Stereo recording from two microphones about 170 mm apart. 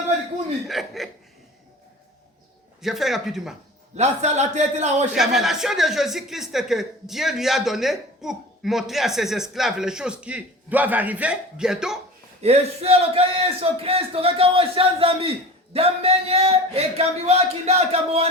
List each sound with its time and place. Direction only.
0.7 s speech: centre (ahead or behind)
2.8 s speech: centre (ahead or behind)
3.9 s a man's voice: 40° right (ahead or behind)
5.1 s speech: centre (ahead or behind)
12.4 s a man's voice: 40° right (ahead or behind)